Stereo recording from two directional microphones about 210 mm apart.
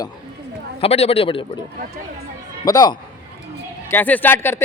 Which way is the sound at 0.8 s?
30° left (ahead or behind).